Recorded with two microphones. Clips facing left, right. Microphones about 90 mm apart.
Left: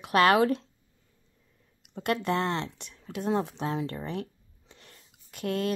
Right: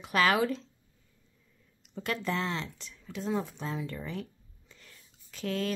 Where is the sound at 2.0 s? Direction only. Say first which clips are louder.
Left 5 dB; 55° left (ahead or behind).